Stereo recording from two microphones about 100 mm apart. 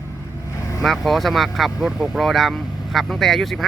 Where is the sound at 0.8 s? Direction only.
Centre (ahead or behind).